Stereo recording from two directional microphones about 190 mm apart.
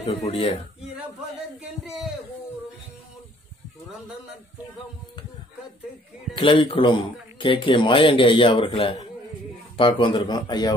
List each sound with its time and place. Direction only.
0.0 s speech: 35° left (ahead or behind)
1.9 s a man's voice: centre (ahead or behind)
6.3 s speech: 25° left (ahead or behind)